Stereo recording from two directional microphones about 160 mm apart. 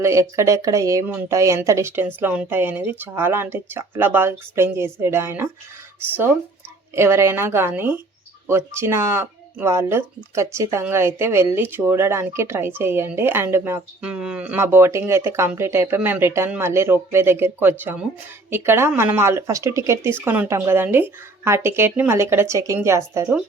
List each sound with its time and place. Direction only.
0.0 s speech: 20° right (ahead or behind)